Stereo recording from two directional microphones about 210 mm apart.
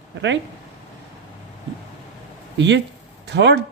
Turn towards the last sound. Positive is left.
turn(degrees=-55)  # may be behind; listen again after turning